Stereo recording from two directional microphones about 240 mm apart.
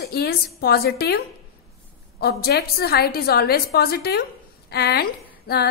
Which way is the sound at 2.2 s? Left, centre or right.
Left.